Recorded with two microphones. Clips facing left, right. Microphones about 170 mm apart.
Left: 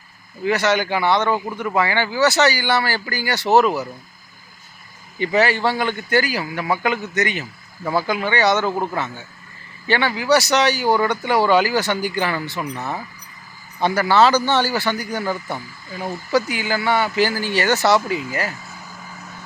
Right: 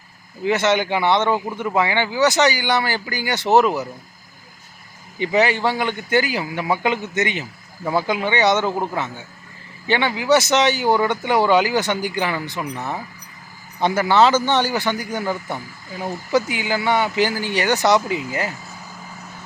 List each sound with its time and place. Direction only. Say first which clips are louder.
0.4 s speech: right 1 dB; 20° right (ahead or behind)
5.2 s speech: even; 20° right (ahead or behind)